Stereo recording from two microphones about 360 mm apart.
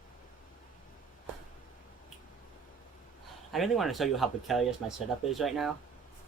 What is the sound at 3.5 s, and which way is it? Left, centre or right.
Speech, centre.